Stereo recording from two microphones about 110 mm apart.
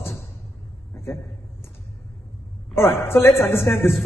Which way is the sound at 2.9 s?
20° left (ahead or behind).